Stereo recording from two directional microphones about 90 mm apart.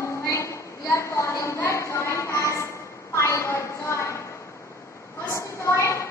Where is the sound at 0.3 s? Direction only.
30° left (ahead or behind).